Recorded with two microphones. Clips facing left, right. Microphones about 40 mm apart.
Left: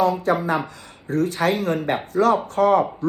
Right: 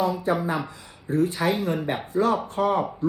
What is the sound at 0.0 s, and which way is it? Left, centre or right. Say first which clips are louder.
Speech: left 4 dB; left.